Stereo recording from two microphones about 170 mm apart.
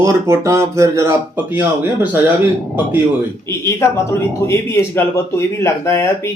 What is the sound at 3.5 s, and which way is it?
A man's voice, 15° left (ahead or behind).